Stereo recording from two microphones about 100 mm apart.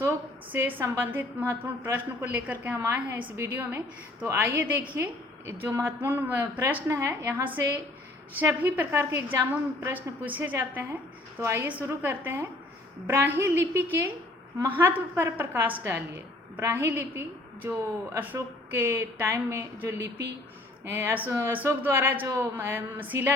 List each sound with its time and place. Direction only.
0.0 s a woman's voice: 25° right (ahead or behind)
9.9 s a woman's voice: 20° right (ahead or behind)